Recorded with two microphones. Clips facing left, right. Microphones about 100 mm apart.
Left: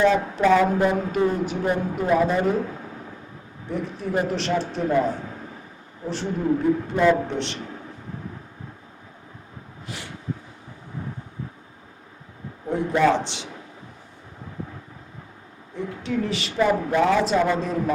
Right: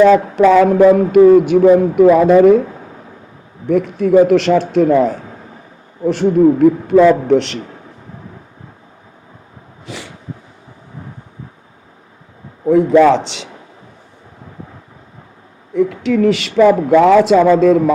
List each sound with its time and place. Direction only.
0.0 s speech: 70° right (ahead or behind); by 2.6 s 90° right
3.7 s speech: 80° right
6.1 s a man's voice: 80° right
9.8 s a sound: 90° right
12.7 s speech: 90° right
15.7 s speech: 90° right